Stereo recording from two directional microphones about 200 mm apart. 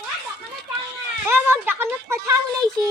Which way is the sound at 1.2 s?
10° right (ahead or behind).